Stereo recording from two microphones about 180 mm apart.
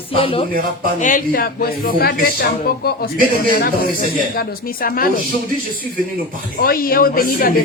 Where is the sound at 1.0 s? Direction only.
50° left (ahead or behind).